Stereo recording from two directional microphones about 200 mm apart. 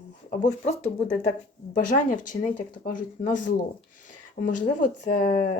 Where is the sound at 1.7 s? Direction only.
40° left (ahead or behind).